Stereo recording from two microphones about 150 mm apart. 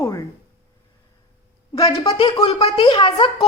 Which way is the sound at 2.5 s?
45° left (ahead or behind).